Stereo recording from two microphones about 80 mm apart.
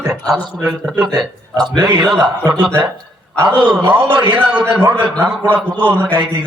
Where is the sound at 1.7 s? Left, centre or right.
Right.